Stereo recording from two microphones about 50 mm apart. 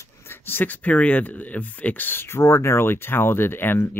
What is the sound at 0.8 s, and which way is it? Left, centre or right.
Speech, left.